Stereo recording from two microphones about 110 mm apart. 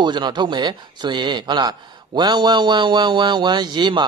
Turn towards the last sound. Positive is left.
turn(degrees=-45)  # may be behind; listen again after turning